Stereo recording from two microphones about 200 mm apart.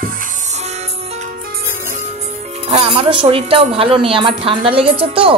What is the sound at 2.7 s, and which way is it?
A woman's voice, 30° right (ahead or behind).